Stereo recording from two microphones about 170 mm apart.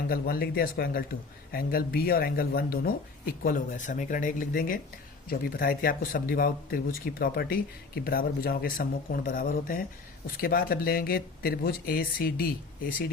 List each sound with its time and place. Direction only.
0.1 s speech: 60° left (ahead or behind)